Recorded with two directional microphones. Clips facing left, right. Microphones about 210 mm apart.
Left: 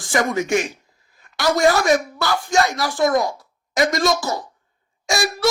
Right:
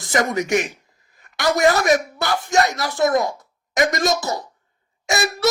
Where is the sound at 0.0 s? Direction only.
20° right (ahead or behind).